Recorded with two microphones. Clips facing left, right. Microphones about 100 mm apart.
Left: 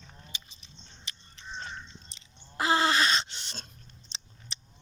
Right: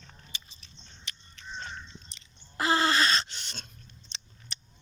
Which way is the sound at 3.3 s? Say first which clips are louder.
Even; 30° left (ahead or behind).